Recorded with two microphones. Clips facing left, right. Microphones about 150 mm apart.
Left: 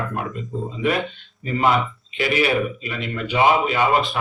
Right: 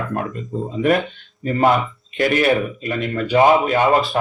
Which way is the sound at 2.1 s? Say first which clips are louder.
Right 4 dB; 50° right (ahead or behind).